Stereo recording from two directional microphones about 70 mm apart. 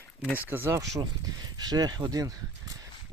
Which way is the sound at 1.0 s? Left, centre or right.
Right.